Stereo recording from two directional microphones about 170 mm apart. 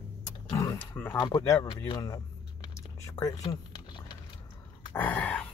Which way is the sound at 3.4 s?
25° left (ahead or behind).